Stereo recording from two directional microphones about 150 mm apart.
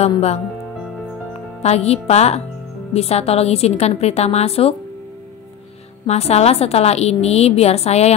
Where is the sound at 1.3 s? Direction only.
45° left (ahead or behind).